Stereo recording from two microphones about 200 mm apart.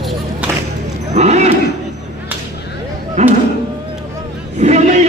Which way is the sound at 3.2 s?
35° right (ahead or behind).